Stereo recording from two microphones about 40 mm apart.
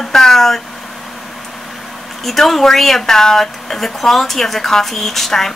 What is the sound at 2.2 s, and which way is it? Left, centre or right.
A woman's voice, centre.